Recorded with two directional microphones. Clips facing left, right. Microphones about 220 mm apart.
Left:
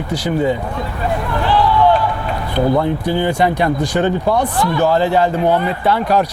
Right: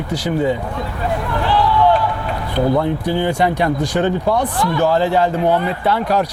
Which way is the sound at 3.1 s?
15° left (ahead or behind).